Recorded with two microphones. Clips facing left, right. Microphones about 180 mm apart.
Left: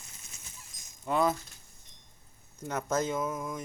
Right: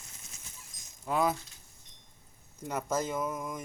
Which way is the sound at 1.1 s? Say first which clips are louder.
Left 2 dB; 5° right (ahead or behind).